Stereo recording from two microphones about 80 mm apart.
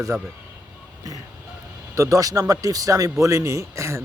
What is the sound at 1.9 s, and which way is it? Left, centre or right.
A man's voice, right.